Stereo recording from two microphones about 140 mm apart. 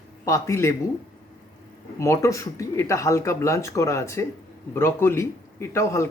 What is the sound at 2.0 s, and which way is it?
A man's voice, 20° left (ahead or behind).